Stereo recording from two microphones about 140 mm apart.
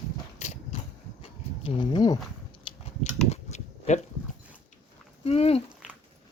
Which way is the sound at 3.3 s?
55° left (ahead or behind).